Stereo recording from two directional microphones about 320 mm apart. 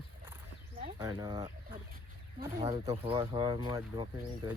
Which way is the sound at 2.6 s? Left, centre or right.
Centre.